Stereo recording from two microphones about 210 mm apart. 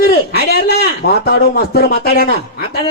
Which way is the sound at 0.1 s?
50° left (ahead or behind).